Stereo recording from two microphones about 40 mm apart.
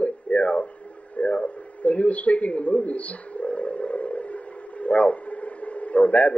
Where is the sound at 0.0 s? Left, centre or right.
Left.